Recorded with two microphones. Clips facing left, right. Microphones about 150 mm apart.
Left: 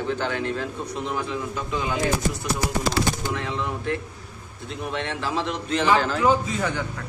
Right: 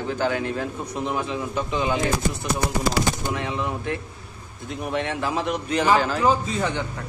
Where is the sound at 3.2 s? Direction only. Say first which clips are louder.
Right 1 dB; 15° right (ahead or behind).